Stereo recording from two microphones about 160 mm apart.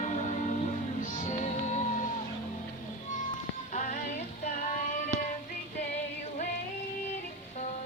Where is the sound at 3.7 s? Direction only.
50° left (ahead or behind).